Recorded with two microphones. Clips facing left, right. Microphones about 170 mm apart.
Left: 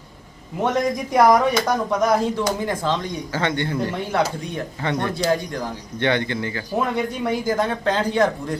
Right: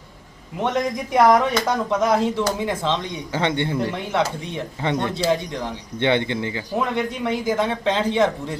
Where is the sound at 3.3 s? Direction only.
20° right (ahead or behind).